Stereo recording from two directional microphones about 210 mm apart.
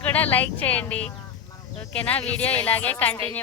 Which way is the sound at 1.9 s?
5° left (ahead or behind).